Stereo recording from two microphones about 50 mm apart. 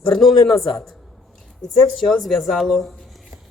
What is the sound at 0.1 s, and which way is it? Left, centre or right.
A woman's voice, centre.